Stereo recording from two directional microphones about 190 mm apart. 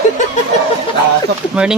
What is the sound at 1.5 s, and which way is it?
Speech, 5° right (ahead or behind).